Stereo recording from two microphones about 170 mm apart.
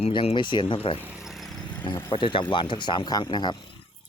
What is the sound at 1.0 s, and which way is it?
Vehicle, 5° right (ahead or behind).